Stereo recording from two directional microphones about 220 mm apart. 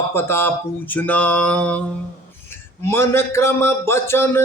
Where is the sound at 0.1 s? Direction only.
10° left (ahead or behind).